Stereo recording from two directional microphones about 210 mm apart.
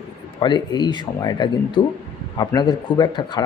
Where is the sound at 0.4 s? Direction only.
20° left (ahead or behind).